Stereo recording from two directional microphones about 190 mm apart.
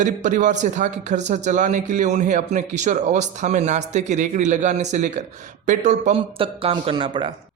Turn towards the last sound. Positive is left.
turn(degrees=-25)  # may be behind; listen again after turning